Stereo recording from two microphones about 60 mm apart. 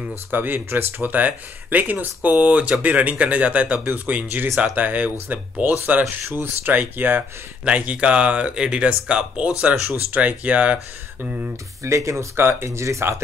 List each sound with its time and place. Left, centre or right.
0.3 s speech: right
7.6 s speech: right
11.8 s speech: right
12.4 s speech: right